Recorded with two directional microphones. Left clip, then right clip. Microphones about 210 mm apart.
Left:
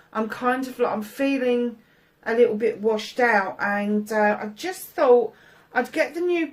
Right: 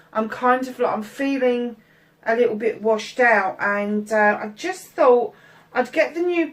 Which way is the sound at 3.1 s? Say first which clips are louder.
Right 4 dB; 45° left (ahead or behind).